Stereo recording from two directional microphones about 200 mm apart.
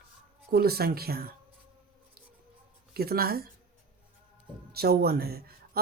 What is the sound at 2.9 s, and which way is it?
Speech, 50° right (ahead or behind).